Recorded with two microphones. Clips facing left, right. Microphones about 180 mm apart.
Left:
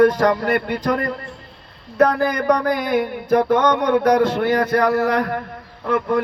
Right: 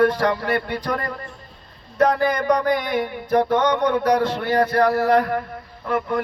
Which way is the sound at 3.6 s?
45° left (ahead or behind).